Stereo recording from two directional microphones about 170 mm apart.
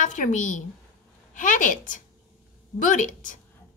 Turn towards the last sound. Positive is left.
turn(degrees=50)  # may be behind; listen again after turning